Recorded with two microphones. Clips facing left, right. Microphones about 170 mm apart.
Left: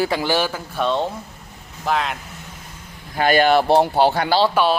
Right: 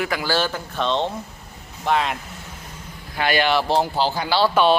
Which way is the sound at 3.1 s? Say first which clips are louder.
Left 5 dB; 45° left (ahead or behind).